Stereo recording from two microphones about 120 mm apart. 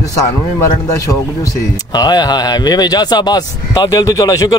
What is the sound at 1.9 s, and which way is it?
Speech, 35° left (ahead or behind).